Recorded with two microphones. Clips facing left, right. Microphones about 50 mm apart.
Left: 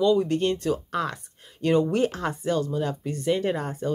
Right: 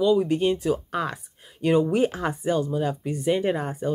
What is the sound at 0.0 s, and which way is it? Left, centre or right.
Speech, centre.